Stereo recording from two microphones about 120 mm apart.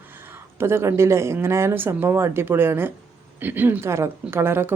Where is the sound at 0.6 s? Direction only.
20° right (ahead or behind).